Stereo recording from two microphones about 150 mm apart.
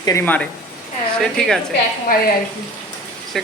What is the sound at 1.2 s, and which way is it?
Speech, 5° left (ahead or behind).